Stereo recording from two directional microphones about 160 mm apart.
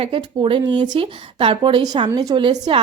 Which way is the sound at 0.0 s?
35° right (ahead or behind).